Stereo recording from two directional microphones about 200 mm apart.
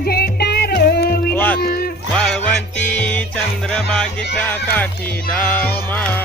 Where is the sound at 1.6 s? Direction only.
50° left (ahead or behind).